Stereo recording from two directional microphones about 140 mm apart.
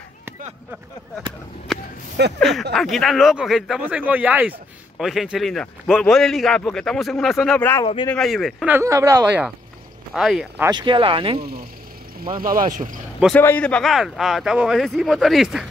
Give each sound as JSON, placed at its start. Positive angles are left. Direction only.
{"t": 1.7, "sound": "whip", "side_deg": 0}
{"t": 2.4, "sound": "speech", "side_deg": 0}
{"t": 7.8, "sound": "speech", "side_deg": 35}
{"t": 8.1, "sound": "speech", "side_deg": 5}
{"t": 8.6, "sound": "speech", "side_deg": -20}
{"t": 10.1, "sound": "speech", "side_deg": -5}
{"t": 10.7, "sound": "speech", "side_deg": -35}
{"t": 12.4, "sound": "speech", "side_deg": -80}
{"t": 13.3, "sound": "speech", "side_deg": 10}